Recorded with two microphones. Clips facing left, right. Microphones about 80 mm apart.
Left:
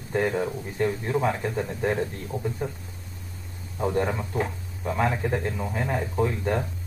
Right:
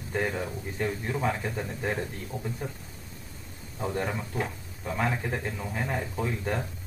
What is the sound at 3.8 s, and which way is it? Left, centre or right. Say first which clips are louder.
Speech: left 5 dB; centre.